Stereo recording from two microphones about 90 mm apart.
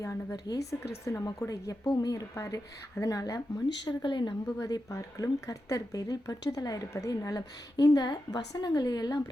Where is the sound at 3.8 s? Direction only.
60° left (ahead or behind).